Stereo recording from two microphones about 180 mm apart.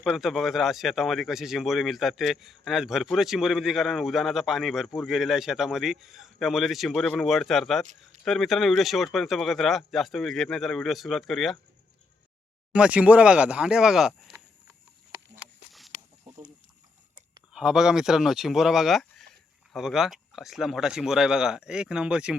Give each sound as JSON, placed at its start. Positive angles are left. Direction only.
{"t": 0.0, "sound": "speech", "side_deg": 0}
{"t": 12.7, "sound": "speech", "side_deg": -5}
{"t": 17.5, "sound": "speech", "side_deg": -5}